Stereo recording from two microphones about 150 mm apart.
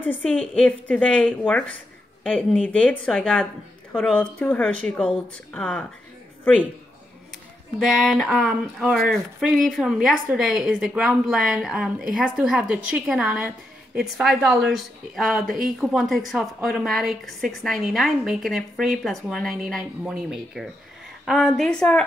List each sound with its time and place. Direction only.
0.0 s speech: 10° left (ahead or behind)
7.8 s speech: centre (ahead or behind)
15.4 s speech: 65° right (ahead or behind)
15.8 s speech: centre (ahead or behind)